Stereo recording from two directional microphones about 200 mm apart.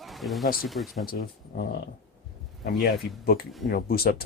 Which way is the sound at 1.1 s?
50° left (ahead or behind).